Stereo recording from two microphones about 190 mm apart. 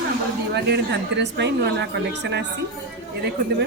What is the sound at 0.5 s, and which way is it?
Speech, 65° right (ahead or behind).